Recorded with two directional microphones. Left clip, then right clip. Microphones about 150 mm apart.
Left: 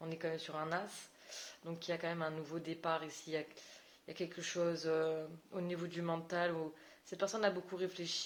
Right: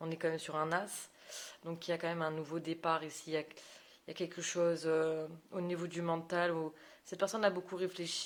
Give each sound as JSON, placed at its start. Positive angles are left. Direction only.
{"t": 0.0, "sound": "speech", "side_deg": -50}